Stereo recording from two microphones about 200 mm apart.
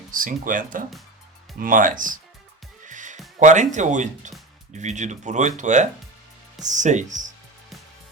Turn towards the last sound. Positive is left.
turn(degrees=-40)  # may be behind; listen again after turning